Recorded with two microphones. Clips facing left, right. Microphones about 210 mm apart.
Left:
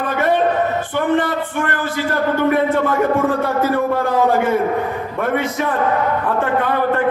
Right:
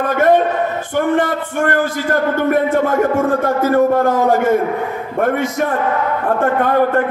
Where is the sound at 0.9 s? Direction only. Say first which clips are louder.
Right 3 dB; 45° right (ahead or behind).